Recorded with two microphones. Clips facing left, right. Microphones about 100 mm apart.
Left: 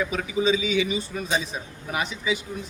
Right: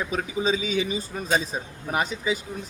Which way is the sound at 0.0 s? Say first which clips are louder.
Left 2 dB; 35° right (ahead or behind).